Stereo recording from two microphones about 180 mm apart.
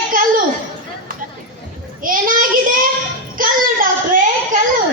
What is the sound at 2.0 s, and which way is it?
Child singing, 50° right (ahead or behind).